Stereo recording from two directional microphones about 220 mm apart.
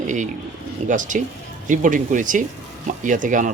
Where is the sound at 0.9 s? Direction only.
35° right (ahead or behind).